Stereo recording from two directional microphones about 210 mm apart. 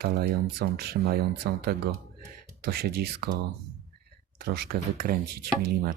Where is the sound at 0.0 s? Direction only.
50° right (ahead or behind).